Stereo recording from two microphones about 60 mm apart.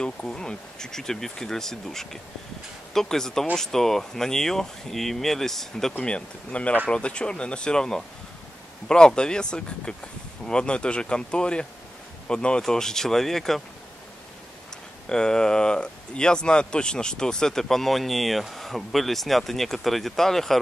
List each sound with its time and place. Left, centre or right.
0.0 s speech: centre
5.9 s speech: centre
15.0 s speech: centre